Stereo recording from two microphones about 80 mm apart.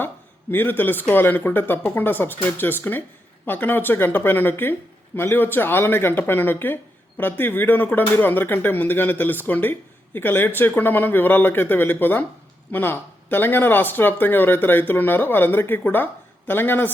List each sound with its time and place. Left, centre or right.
0.5 s speech: left